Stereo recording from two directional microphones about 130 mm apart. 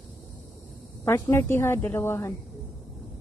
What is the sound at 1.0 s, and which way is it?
A woman's voice, 20° left (ahead or behind).